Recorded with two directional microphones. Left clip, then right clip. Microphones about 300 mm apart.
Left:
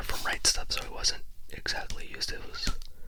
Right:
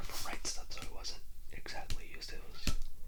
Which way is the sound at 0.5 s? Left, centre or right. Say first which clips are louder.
Left 13 dB; left.